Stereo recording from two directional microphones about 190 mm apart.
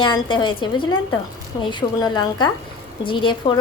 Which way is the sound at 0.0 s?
25° left (ahead or behind).